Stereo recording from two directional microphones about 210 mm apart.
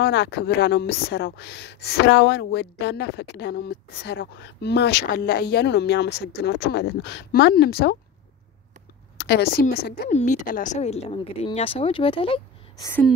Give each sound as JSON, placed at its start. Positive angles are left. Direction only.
{"t": 0.0, "sound": "speech", "side_deg": 50}
{"t": 9.2, "sound": "speech", "side_deg": 50}